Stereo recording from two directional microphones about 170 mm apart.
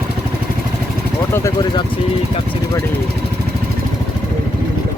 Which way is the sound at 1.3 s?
15° left (ahead or behind).